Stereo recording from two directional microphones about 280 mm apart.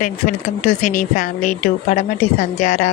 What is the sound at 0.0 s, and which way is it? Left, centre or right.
Speech, left.